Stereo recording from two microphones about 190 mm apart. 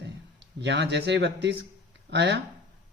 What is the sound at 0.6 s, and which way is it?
A man's voice, 65° right (ahead or behind).